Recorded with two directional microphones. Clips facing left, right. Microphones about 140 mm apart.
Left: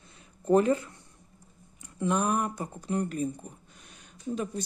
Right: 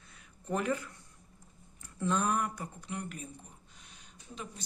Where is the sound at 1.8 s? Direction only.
15° left (ahead or behind).